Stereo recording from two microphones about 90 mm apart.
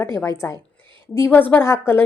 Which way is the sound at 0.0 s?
30° left (ahead or behind).